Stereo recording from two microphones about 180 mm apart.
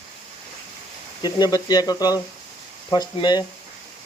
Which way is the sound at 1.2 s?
20° left (ahead or behind).